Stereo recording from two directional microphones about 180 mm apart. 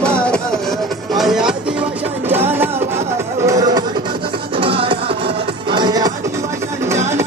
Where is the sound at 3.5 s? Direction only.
20° right (ahead or behind).